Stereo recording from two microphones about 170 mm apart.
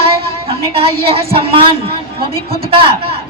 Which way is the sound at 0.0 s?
35° right (ahead or behind).